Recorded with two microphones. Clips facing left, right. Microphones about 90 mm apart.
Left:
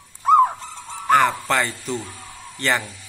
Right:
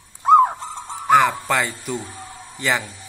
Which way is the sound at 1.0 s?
5° right (ahead or behind).